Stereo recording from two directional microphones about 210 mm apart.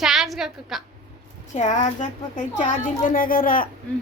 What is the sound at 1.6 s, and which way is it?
Speech, 35° left (ahead or behind).